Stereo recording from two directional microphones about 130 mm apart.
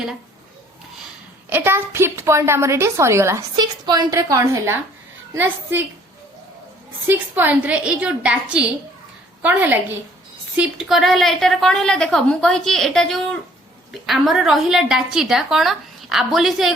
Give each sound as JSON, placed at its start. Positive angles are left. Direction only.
{"t": 1.5, "sound": "a woman's voice", "side_deg": -15}
{"t": 3.5, "sound": "a woman's voice", "side_deg": -30}
{"t": 7.1, "sound": "a woman's voice", "side_deg": -15}